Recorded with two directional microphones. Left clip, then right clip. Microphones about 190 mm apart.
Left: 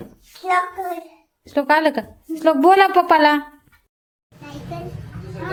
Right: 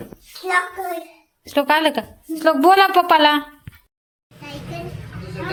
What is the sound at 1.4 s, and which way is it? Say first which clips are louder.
A woman's voice: even; 10° left (ahead or behind).